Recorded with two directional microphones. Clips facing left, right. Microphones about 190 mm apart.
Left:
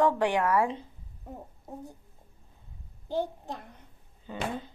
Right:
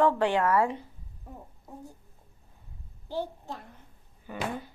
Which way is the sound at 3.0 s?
20° left (ahead or behind).